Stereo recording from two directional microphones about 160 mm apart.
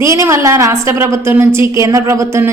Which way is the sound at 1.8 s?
20° right (ahead or behind).